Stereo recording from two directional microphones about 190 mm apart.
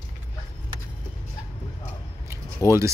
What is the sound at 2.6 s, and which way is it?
Speech, 15° left (ahead or behind).